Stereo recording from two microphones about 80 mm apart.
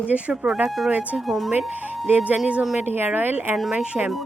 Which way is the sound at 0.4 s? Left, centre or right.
Centre.